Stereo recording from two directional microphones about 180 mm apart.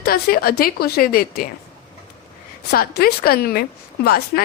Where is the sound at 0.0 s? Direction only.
55° left (ahead or behind).